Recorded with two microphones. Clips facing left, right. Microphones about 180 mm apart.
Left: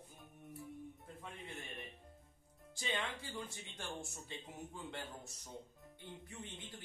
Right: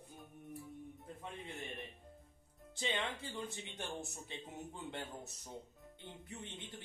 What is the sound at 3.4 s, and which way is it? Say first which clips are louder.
Speech: right 3 dB; 25° right (ahead or behind).